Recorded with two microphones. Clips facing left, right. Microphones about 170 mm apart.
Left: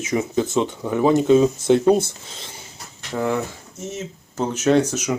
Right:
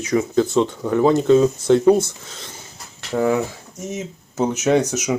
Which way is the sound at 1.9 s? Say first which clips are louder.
Right 1 dB; 25° left (ahead or behind).